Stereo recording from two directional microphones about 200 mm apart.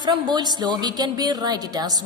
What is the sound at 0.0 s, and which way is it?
A woman's voice, 20° right (ahead or behind).